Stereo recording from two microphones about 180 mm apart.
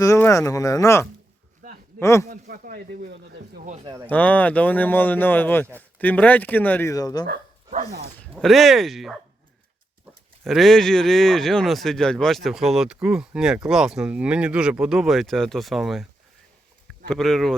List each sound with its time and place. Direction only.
0.0 s speech: 15° left (ahead or behind)
2.2 s speech: 55° right (ahead or behind)
3.8 s speech: 25° right (ahead or behind)
4.1 s speech: 10° left (ahead or behind)
8.4 s speech: centre (ahead or behind)
10.4 s speech: centre (ahead or behind)
17.1 s speech: centre (ahead or behind)